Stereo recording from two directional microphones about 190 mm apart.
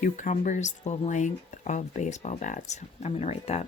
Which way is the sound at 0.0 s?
40° left (ahead or behind).